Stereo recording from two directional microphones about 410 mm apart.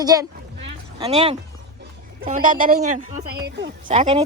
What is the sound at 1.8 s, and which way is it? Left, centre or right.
Speech, centre.